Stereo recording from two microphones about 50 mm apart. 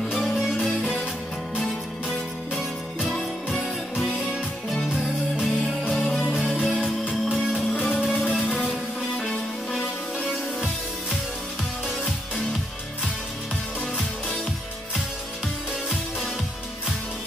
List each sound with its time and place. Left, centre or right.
0.1 s music: centre
1.6 s music: centre
4.8 s music: centre
8.1 s music: centre
10.2 s music: centre